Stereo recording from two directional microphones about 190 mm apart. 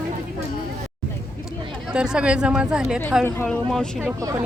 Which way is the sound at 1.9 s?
5° right (ahead or behind).